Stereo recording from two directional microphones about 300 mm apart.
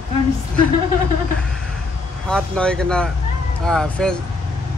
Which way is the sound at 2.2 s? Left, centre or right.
Centre.